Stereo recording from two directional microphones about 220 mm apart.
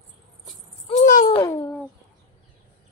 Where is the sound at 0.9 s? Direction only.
35° left (ahead or behind).